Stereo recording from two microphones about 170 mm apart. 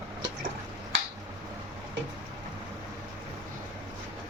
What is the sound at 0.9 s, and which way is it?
Finger snapping, 90° right.